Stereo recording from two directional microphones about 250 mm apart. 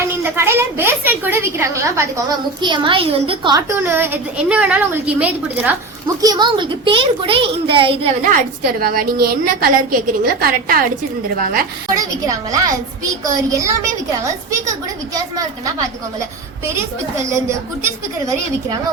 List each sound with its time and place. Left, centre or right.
0.1 s a woman's voice: centre
6.2 s a child's voice: centre; by 10.8 s right
11.9 s a woman's voice: centre
15.1 s a woman's voice: centre
17.8 s a woman's voice: centre